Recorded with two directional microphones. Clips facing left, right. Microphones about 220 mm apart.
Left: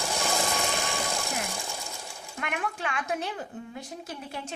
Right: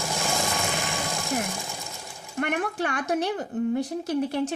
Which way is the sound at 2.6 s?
40° right (ahead or behind).